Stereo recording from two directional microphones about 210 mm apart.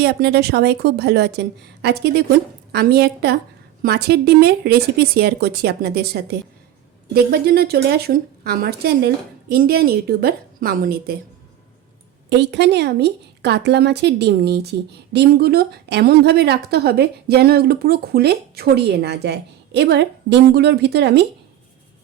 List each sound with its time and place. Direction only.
0.0 s a woman's voice: 50° right (ahead or behind)
12.3 s a woman's voice: 55° right (ahead or behind)